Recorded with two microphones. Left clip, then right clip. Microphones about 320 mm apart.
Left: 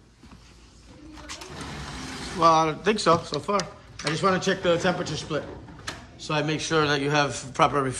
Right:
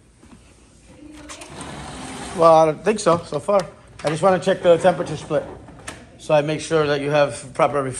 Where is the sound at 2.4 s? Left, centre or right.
Centre.